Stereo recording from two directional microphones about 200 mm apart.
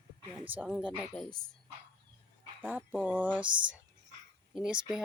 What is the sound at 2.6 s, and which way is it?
Speech, 10° right (ahead or behind).